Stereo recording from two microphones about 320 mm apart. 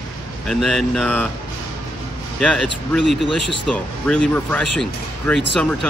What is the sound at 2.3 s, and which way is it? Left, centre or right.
Speech, centre.